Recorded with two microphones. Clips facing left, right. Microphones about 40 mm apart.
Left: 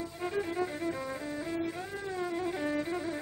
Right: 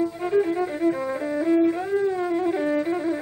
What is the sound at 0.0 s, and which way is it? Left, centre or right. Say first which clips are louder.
Music: right 12 dB; centre.